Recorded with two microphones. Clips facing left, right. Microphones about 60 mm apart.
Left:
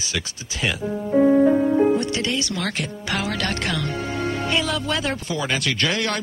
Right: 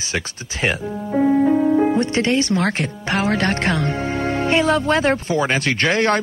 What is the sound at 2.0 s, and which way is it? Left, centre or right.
Music, right.